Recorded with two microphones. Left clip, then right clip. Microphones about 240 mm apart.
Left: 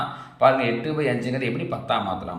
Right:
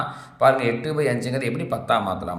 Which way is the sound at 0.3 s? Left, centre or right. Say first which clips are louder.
Right 1 dB; right.